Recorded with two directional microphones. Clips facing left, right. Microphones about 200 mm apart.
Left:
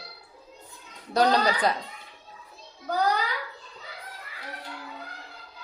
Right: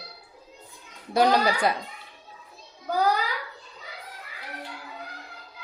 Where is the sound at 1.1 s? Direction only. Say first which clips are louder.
Right 1 dB; 10° right (ahead or behind).